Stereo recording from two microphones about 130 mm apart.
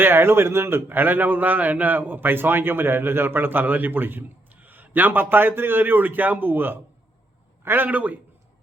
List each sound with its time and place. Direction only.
0.0 s a man's voice: 15° right (ahead or behind)